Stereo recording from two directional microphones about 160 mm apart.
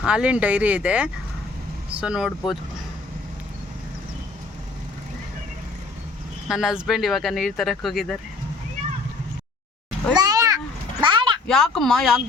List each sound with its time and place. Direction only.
0.0 s speech: 5° right (ahead or behind)
6.5 s speech: centre (ahead or behind)
10.2 s cat: 25° right (ahead or behind)
11.0 s a sound: 30° right (ahead or behind)
11.4 s speech: centre (ahead or behind)